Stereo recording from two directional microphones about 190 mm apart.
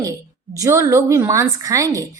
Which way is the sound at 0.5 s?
15° right (ahead or behind).